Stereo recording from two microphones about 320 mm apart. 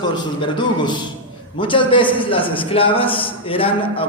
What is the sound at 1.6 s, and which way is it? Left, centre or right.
A man's voice, centre.